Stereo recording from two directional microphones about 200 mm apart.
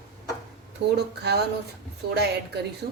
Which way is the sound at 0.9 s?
55° right (ahead or behind).